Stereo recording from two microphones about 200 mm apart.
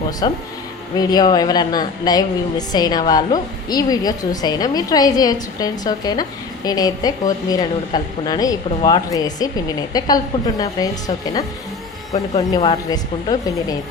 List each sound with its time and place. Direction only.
0.2 s a woman's voice: 20° left (ahead or behind)
12.5 s a woman's voice: 25° left (ahead or behind)